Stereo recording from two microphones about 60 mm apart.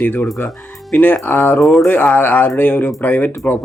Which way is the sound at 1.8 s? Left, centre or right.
Left.